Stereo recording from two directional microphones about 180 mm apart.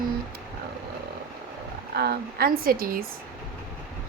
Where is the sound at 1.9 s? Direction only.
60° right (ahead or behind).